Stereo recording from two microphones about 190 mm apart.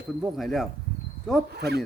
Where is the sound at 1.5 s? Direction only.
60° right (ahead or behind).